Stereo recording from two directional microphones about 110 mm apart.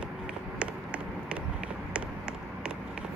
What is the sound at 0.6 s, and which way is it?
Run, 10° right (ahead or behind).